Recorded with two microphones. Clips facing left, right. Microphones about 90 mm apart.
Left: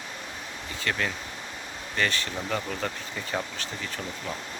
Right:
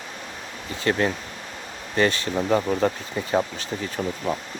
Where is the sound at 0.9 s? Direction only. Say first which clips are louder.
Right 8 dB; 30° right (ahead or behind).